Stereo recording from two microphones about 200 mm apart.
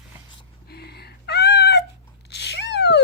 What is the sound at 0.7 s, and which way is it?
Cat, 55° left (ahead or behind).